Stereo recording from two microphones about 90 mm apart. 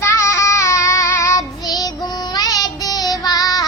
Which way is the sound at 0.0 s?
30° left (ahead or behind).